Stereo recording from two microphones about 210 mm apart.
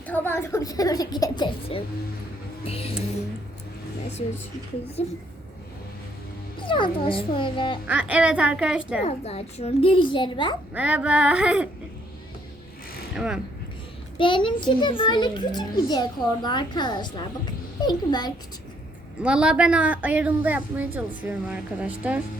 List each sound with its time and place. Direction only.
0.0 s a woman's voice: 10° left (ahead or behind); by 3.0 s 30° left (ahead or behind)
5.0 s a woman's voice: 30° left (ahead or behind)
6.6 s a woman's voice: 25° left (ahead or behind)
7.9 s a sound: 5° right (ahead or behind)
9.0 s a woman's voice: 30° left (ahead or behind)
10.8 s a sound: 5° right (ahead or behind)
13.1 s a sound: 5° right (ahead or behind)
14.2 s a woman's voice: 25° left (ahead or behind)
19.2 s a woman's voice: 5° right (ahead or behind)